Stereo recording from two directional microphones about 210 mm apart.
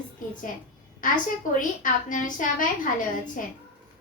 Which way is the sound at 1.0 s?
40° left (ahead or behind).